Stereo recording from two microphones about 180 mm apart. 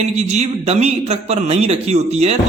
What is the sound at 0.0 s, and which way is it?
A man's voice, 40° right (ahead or behind).